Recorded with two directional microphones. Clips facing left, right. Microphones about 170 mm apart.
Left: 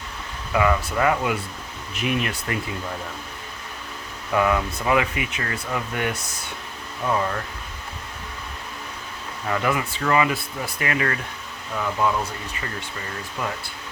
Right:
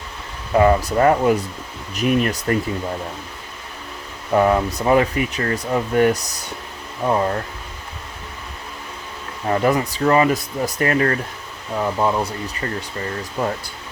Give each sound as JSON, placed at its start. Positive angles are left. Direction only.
{"t": 0.5, "sound": "speech", "side_deg": -35}
{"t": 4.3, "sound": "speech", "side_deg": -35}
{"t": 9.5, "sound": "speech", "side_deg": -35}